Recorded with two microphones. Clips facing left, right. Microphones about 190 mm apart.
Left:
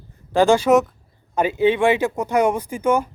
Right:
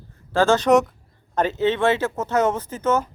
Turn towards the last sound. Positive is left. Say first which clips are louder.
# left 2 dB
turn(degrees=10)  # may be behind; listen again after turning